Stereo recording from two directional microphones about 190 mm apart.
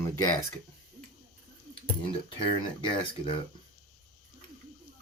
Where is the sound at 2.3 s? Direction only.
25° left (ahead or behind).